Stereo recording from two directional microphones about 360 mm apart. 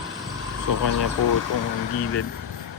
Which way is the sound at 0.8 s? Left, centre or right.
Left.